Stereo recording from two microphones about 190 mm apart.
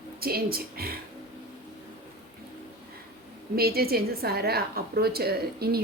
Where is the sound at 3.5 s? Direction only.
55° right (ahead or behind).